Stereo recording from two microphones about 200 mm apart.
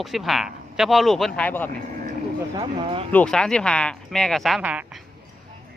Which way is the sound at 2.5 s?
25° right (ahead or behind).